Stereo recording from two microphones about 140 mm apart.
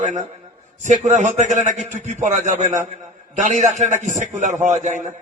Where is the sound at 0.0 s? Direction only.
60° right (ahead or behind).